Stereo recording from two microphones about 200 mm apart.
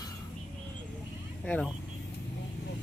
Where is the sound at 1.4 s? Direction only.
5° left (ahead or behind).